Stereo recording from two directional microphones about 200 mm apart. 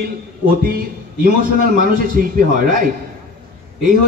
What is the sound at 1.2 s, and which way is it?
A man's voice, 45° right (ahead or behind).